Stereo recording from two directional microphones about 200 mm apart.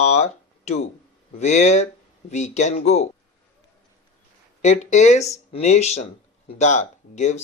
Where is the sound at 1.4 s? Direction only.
35° left (ahead or behind).